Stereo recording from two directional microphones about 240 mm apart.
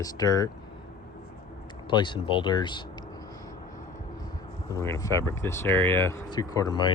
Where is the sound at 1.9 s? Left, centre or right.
Centre.